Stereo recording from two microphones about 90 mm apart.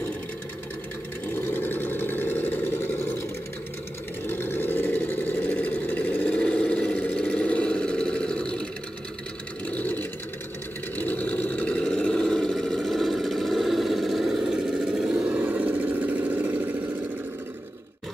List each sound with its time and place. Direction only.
1.3 s vehicle: 20° left (ahead or behind)
4.3 s vehicle: 25° left (ahead or behind)
9.7 s sewing machine: 20° left (ahead or behind)
11.0 s a sound: 20° left (ahead or behind); by 16.7 s 15° right (ahead or behind)